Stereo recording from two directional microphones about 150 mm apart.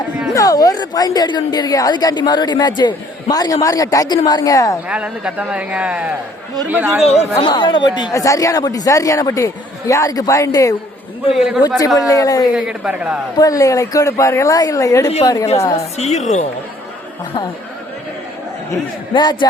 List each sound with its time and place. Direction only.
0.3 s a woman's voice: 25° left (ahead or behind)
4.9 s a man's voice: 5° right (ahead or behind)
7.2 s a woman's voice: 35° left (ahead or behind)
11.3 s a man's voice: centre (ahead or behind)
11.9 s a woman's voice: 25° left (ahead or behind)
12.5 s a man's voice: 5° right (ahead or behind)
13.4 s a woman's voice: 20° left (ahead or behind)
15.7 s a woman's voice: 45° left (ahead or behind)
18.7 s a woman's voice: 30° left (ahead or behind)